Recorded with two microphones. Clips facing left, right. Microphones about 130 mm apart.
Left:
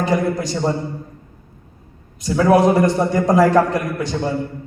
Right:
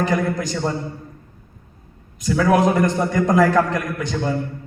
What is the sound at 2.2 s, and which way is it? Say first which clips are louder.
A man's voice: left 3 dB; 30° left (ahead or behind).